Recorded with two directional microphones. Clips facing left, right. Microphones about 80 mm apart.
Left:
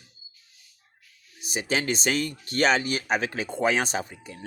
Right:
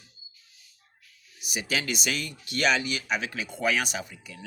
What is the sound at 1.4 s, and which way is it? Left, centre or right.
Speech, left.